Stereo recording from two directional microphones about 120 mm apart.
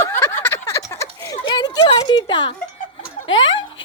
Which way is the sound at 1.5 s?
35° left (ahead or behind).